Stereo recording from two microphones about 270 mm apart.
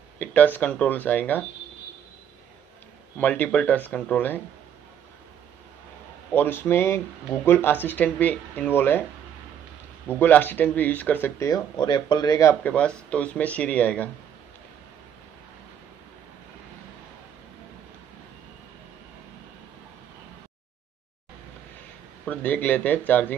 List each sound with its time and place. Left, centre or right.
0.2 s speech: centre
3.2 s speech: centre
6.3 s speech: centre
10.0 s speech: centre
22.2 s speech: centre